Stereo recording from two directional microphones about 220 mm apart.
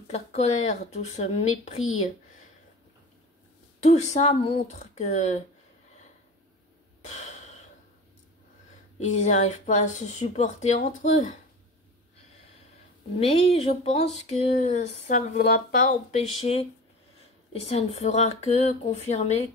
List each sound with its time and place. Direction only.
0.1 s speech: 30° left (ahead or behind)
3.8 s speech: 30° left (ahead or behind)
7.0 s breathing: 30° left (ahead or behind)
9.0 s speech: 30° left (ahead or behind)
13.2 s speech: 25° left (ahead or behind)